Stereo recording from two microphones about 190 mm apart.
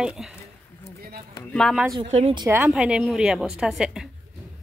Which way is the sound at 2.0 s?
35° right (ahead or behind).